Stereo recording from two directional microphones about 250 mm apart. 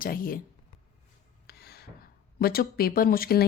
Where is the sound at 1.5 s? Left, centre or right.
Left.